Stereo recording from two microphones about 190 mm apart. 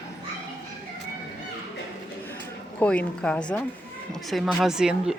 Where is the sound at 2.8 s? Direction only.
5° left (ahead or behind).